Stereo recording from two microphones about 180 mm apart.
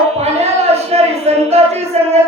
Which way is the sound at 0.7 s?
35° right (ahead or behind).